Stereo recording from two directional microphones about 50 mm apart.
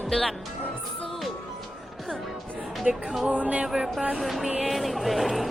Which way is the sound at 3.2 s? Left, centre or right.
Right.